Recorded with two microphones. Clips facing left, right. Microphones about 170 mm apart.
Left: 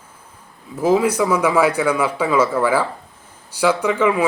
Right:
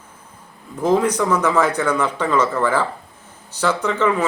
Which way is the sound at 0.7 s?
5° left (ahead or behind).